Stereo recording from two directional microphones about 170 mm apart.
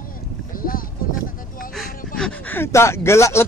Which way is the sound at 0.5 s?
55° left (ahead or behind).